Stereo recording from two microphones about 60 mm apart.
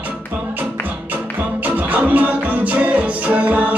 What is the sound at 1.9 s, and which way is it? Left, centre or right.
Music, right.